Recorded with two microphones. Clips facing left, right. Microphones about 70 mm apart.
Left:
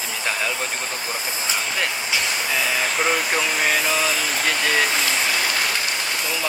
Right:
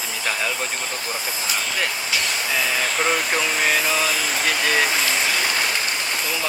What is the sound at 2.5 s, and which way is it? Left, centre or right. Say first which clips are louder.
Speech: even; centre.